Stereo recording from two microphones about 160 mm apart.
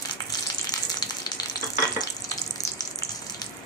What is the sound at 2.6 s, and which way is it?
Water, 25° left (ahead or behind).